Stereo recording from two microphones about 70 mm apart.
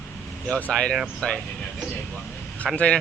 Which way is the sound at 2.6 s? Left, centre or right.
Centre.